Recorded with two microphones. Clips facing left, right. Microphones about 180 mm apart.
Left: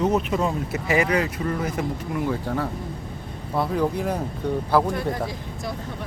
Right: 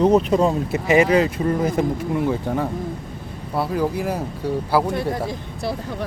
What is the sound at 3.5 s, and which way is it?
Speech, 5° right (ahead or behind).